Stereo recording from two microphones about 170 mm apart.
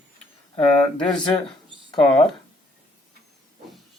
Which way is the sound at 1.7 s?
30° left (ahead or behind).